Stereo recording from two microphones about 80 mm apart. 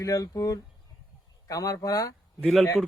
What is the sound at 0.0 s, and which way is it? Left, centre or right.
Speech, left.